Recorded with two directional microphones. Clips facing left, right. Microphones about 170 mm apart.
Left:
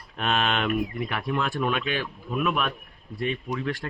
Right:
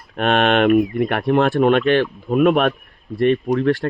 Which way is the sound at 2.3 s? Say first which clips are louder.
Right 12 dB; 55° right (ahead or behind).